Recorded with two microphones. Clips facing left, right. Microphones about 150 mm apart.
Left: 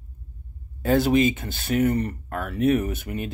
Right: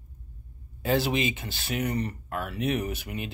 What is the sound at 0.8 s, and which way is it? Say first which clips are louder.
Speech: left 7 dB; 45° left (ahead or behind).